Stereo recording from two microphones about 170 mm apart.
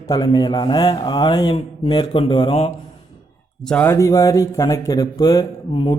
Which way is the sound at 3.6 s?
5° left (ahead or behind).